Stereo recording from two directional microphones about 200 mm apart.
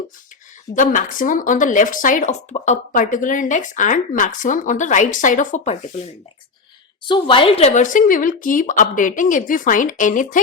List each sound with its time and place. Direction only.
0.8 s speech: 40° left (ahead or behind)
7.0 s speech: 25° left (ahead or behind); by 10.4 s 40° left (ahead or behind)